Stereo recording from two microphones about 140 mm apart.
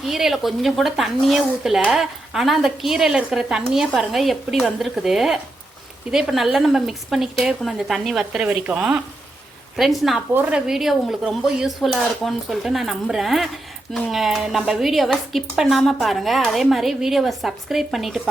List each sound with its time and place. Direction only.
0.0 s a woman's voice: centre (ahead or behind)